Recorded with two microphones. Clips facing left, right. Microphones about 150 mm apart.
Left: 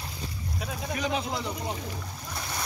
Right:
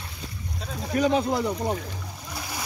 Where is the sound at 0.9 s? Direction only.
50° right (ahead or behind).